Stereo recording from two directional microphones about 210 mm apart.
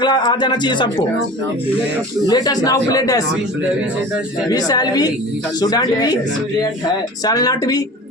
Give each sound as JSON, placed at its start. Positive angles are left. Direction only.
{"t": 0.0, "sound": "speech", "side_deg": 20}
{"t": 2.2, "sound": "speech", "side_deg": 20}
{"t": 4.4, "sound": "speech", "side_deg": 20}
{"t": 7.3, "sound": "speech", "side_deg": 20}